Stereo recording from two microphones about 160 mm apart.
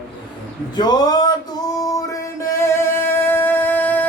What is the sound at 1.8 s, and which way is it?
Music, 20° left (ahead or behind).